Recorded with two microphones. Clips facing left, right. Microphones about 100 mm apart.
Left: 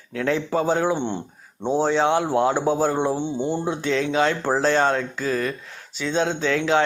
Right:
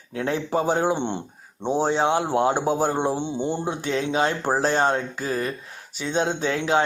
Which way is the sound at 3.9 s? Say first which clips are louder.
Left 2 dB; 35° right (ahead or behind).